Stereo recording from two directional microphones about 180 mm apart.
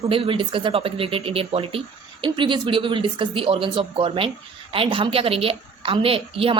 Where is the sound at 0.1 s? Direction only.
30° right (ahead or behind).